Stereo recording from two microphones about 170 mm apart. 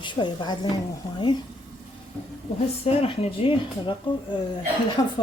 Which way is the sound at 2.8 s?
35° left (ahead or behind).